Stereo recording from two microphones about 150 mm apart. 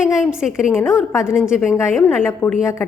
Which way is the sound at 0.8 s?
15° left (ahead or behind).